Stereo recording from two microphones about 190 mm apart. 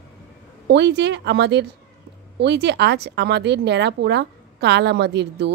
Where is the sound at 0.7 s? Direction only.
65° right (ahead or behind).